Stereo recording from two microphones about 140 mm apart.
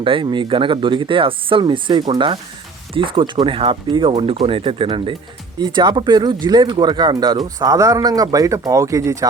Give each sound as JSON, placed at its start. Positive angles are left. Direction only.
{"t": 0.0, "sound": "speech", "side_deg": -40}